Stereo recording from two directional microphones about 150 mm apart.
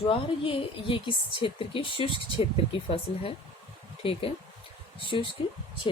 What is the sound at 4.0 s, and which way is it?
A woman's voice, 40° left (ahead or behind).